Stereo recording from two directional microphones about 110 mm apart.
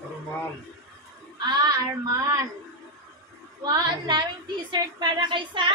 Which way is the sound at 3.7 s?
45° right (ahead or behind).